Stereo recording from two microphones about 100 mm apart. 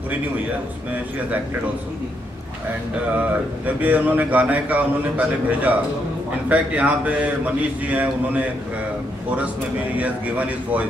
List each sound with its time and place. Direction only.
3.2 s speech: 15° right (ahead or behind)
9.9 s speech: 15° right (ahead or behind)